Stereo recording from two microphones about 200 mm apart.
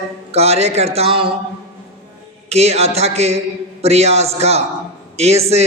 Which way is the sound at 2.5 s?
30° right (ahead or behind).